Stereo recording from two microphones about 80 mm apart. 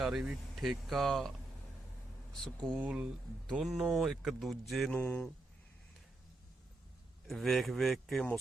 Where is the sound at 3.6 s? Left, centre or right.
Centre.